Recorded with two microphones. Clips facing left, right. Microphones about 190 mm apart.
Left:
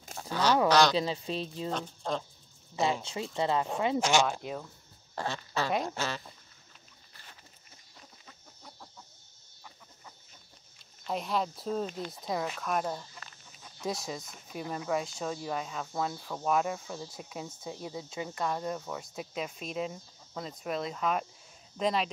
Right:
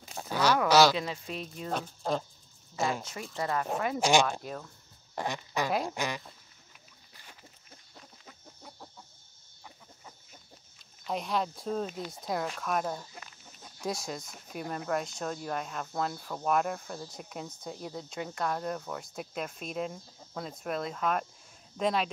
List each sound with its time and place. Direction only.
0.3 s a sound: 10° right (ahead or behind)
0.7 s speech: 5° right (ahead or behind)
0.9 s speech: 25° left (ahead or behind)
1.7 s speech: 10° right (ahead or behind)
2.7 s speech: 20° left (ahead or behind)
4.0 s speech: 15° right (ahead or behind)
4.3 s speech: 10° left (ahead or behind)
5.1 s speech: 15° right (ahead or behind)
5.7 s speech: centre (ahead or behind)
5.9 s speech: 15° right (ahead or behind)
11.1 s speech: centre (ahead or behind)